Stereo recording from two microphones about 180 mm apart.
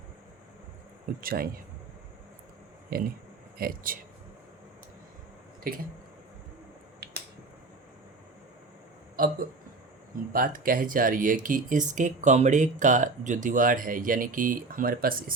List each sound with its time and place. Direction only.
1.2 s speech: 55° right (ahead or behind)
2.9 s speech: 55° right (ahead or behind)
5.7 s speech: 50° right (ahead or behind)
7.0 s finger snapping: 65° right (ahead or behind)
9.2 s speech: 50° right (ahead or behind)
10.3 s speech: 50° right (ahead or behind)